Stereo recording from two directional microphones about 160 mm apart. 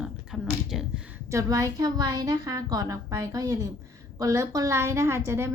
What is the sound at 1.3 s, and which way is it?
A woman's voice, 20° right (ahead or behind).